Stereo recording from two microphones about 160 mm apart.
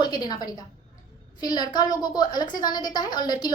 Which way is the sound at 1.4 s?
25° left (ahead or behind).